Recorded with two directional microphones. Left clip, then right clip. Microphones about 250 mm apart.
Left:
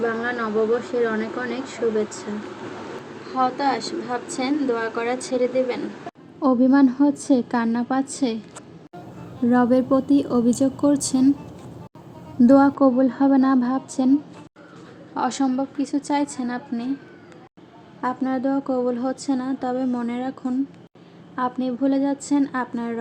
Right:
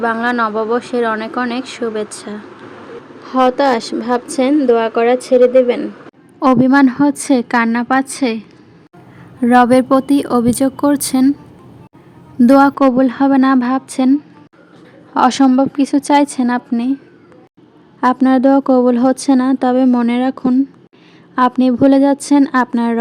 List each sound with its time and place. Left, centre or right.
0.0 s a woman's voice: right
3.3 s a woman's voice: right
6.4 s a woman's voice: right
9.5 s a woman's voice: right
12.4 s a woman's voice: right
18.0 s a woman's voice: right